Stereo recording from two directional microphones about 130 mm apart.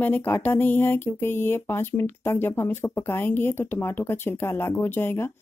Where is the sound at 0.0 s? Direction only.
15° left (ahead or behind).